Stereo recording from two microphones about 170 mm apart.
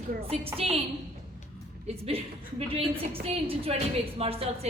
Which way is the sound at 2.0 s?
35° right (ahead or behind).